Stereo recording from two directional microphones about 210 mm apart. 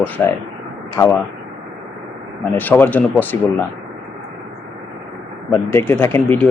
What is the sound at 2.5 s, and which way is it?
Speech, 10° left (ahead or behind).